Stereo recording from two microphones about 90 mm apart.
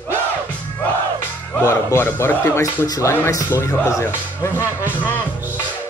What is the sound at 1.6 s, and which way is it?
Speech, 30° left (ahead or behind).